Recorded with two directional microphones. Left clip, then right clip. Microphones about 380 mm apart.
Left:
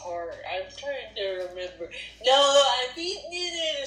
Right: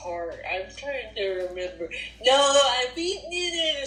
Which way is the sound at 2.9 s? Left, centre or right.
Right.